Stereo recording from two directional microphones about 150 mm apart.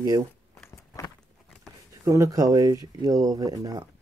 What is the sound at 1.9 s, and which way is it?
Speech, 20° right (ahead or behind).